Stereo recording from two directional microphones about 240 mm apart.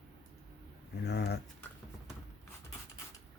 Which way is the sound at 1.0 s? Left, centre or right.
Left.